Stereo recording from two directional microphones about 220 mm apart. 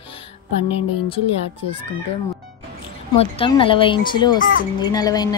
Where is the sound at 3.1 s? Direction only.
25° left (ahead or behind).